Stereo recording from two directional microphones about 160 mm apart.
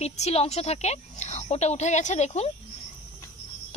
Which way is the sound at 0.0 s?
40° left (ahead or behind).